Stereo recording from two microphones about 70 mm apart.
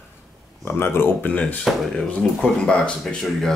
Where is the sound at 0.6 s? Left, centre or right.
Left.